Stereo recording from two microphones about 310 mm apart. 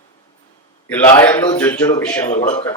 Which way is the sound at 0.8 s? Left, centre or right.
Centre.